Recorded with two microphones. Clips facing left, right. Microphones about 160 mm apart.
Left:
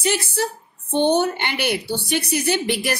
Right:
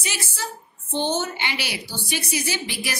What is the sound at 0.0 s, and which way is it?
Speech, 60° left (ahead or behind).